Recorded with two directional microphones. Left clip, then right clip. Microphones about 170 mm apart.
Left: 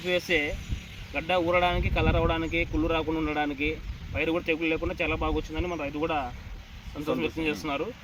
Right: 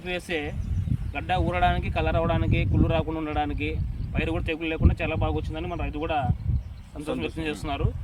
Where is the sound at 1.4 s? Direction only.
15° right (ahead or behind).